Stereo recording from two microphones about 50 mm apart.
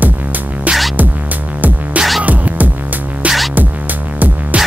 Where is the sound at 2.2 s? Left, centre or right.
Right.